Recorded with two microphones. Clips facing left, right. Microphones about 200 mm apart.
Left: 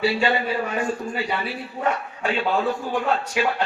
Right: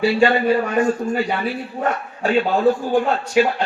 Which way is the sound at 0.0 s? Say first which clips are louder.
Right 6 dB; 50° right (ahead or behind).